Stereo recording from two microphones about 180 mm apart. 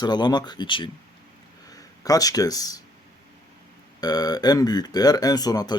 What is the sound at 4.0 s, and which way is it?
Speech, 20° left (ahead or behind).